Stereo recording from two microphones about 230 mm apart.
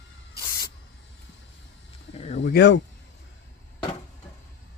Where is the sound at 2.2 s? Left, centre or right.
Left.